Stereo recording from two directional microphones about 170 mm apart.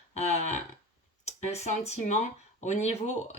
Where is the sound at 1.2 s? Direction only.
40° left (ahead or behind).